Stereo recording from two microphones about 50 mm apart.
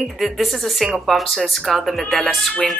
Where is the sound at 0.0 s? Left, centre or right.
Centre.